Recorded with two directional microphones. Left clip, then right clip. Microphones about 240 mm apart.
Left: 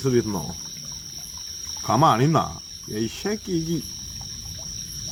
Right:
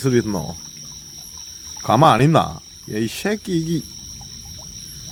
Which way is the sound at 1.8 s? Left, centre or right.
Right.